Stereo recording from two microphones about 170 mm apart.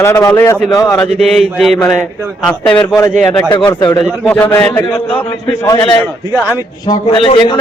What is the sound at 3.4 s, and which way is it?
A man's voice, 20° left (ahead or behind).